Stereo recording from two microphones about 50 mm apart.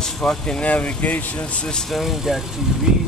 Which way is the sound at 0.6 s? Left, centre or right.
Left.